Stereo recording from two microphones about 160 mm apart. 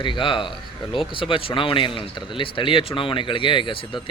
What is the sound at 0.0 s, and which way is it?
Speech, 30° left (ahead or behind).